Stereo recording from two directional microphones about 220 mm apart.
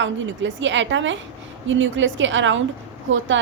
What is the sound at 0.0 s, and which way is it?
A woman's voice, 55° right (ahead or behind).